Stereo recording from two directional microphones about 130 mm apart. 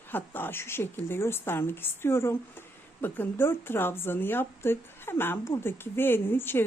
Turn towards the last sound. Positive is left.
turn(degrees=15)  # may be behind; listen again after turning